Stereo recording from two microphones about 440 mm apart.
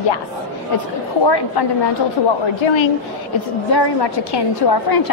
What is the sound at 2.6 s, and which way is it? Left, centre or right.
Speech, left.